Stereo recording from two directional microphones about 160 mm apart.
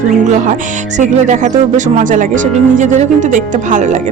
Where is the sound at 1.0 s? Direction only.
50° right (ahead or behind).